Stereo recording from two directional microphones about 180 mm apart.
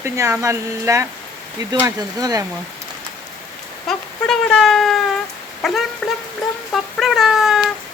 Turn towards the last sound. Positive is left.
turn(degrees=0)  # may be behind; listen again after turning